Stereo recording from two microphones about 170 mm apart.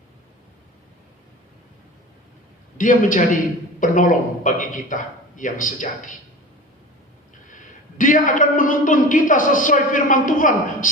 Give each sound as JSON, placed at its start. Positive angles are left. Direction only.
{"t": 2.7, "sound": "a man's voice", "side_deg": 50}
{"t": 7.4, "sound": "a man's voice", "side_deg": 50}